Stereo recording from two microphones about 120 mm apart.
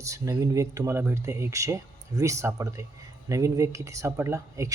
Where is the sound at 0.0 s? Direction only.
25° right (ahead or behind).